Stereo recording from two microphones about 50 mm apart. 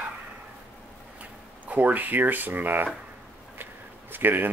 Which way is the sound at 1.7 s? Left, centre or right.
Right.